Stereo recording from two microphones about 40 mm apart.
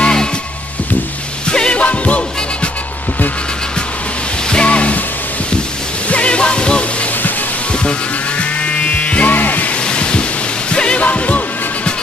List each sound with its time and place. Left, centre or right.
0.0 s music: centre
1.5 s music: left
1.8 s music: left
4.5 s music: left
6.0 s music: left
8.4 s music: left
9.8 s a sound: left
10.7 s music: left